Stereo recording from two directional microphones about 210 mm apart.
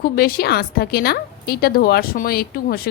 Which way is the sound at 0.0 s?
45° left (ahead or behind).